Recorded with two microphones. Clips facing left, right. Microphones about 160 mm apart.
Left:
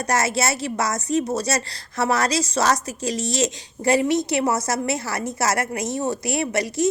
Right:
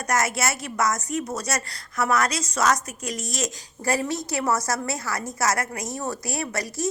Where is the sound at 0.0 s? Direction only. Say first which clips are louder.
Left 3 dB; 30° left (ahead or behind).